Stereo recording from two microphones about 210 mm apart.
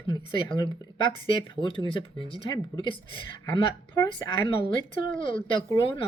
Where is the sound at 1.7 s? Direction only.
25° left (ahead or behind).